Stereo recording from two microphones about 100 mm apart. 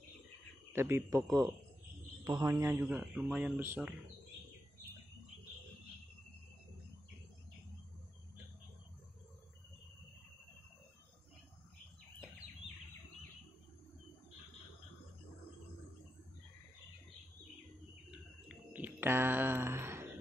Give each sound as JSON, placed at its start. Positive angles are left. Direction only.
{"t": 0.7, "sound": "speech", "side_deg": -25}
{"t": 1.1, "sound": "a man's voice", "side_deg": -40}
{"t": 2.7, "sound": "speech", "side_deg": -20}
{"t": 18.1, "sound": "a sound", "side_deg": -10}